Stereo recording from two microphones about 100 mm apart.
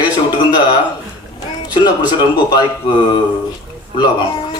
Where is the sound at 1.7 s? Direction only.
45° left (ahead or behind).